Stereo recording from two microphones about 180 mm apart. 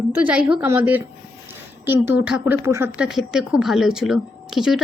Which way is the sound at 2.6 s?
15° right (ahead or behind).